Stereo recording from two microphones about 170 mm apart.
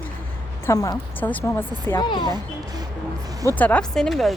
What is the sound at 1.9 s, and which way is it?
Speech, 25° left (ahead or behind).